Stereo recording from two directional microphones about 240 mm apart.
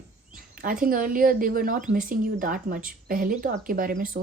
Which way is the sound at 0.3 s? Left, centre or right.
Right.